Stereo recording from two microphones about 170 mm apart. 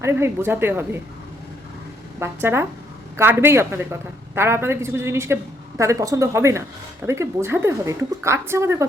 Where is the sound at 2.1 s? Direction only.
15° right (ahead or behind).